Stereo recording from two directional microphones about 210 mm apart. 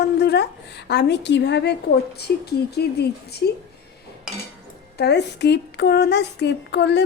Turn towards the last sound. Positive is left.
turn(degrees=55)  # may be behind; listen again after turning